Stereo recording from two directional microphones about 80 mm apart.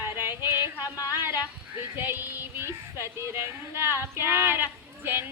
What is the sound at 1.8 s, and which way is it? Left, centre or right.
Child singing, right.